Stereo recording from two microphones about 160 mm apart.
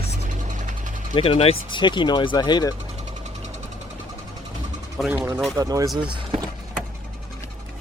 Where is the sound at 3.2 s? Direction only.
45° right (ahead or behind).